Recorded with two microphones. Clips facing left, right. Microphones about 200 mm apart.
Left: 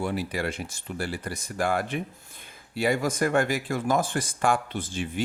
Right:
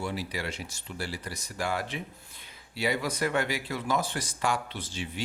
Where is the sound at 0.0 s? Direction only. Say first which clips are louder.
Left 5 dB; 55° left (ahead or behind).